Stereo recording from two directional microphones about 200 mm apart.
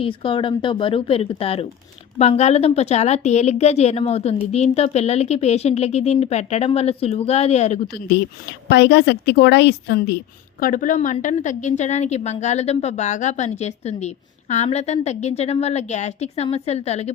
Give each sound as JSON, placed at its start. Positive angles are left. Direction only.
{"t": 0.0, "sound": "a woman's voice", "side_deg": 25}
{"t": 8.7, "sound": "a woman's voice", "side_deg": 60}
{"t": 10.6, "sound": "a woman's voice", "side_deg": 40}